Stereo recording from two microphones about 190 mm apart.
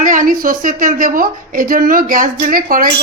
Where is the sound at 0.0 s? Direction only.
45° right (ahead or behind).